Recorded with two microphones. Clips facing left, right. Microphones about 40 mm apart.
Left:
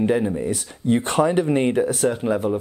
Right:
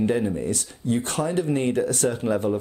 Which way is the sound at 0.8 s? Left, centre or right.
Left.